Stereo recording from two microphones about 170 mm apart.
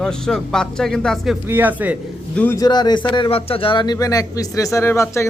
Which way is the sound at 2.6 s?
25° left (ahead or behind).